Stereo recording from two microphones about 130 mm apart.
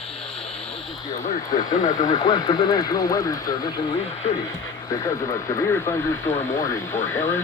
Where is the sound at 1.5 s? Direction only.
30° left (ahead or behind).